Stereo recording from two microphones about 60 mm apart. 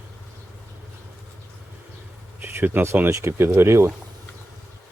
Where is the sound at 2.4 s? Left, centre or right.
Right.